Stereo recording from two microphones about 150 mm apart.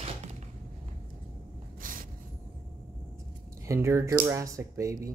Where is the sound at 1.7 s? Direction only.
65° right (ahead or behind).